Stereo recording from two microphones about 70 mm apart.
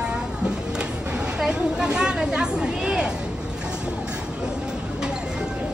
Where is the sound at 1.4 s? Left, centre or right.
Centre.